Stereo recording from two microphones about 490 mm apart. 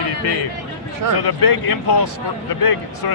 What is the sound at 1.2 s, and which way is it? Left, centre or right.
Speech, left.